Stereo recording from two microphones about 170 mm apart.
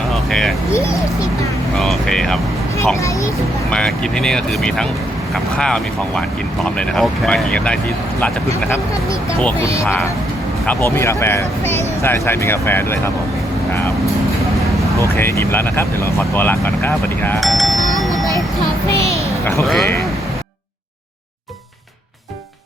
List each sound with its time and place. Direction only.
0.1 s a sound: centre (ahead or behind)
1.8 s speech: centre (ahead or behind)
2.7 s speech: 15° left (ahead or behind)
3.7 s speech: 5° left (ahead or behind)
9.4 s speech: 15° left (ahead or behind)
15.0 s speech: 15° left (ahead or behind)
17.4 s music: centre (ahead or behind)
18.0 s a sound: centre (ahead or behind)
19.6 s speech: centre (ahead or behind)